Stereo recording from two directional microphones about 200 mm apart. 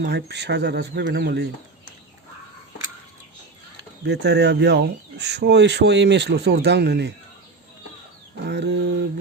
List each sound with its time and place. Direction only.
0.0 s speech: 55° right (ahead or behind)
4.0 s speech: 55° right (ahead or behind)
8.4 s speech: 60° right (ahead or behind)